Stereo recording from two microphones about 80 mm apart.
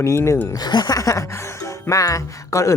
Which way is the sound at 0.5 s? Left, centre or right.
Left.